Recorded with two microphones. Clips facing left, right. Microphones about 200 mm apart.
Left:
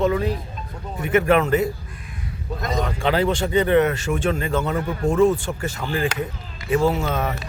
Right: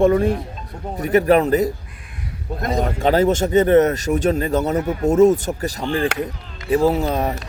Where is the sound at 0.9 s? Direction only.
40° right (ahead or behind).